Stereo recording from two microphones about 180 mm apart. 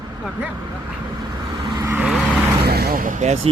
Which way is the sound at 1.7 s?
15° right (ahead or behind).